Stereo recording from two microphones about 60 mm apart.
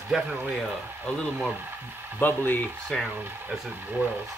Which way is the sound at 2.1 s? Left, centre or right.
Left.